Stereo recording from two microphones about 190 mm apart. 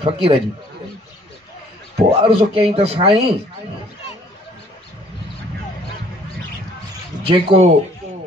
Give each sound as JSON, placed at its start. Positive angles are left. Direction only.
{"t": 0.0, "sound": "speech", "side_deg": -30}
{"t": 2.1, "sound": "a man's voice", "side_deg": -30}
{"t": 7.2, "sound": "speech", "side_deg": -25}